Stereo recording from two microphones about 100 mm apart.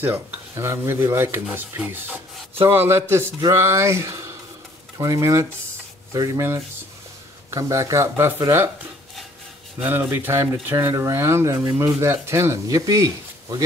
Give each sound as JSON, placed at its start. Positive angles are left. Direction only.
{"t": 0.0, "sound": "speech", "side_deg": -20}
{"t": 9.8, "sound": "speech", "side_deg": -20}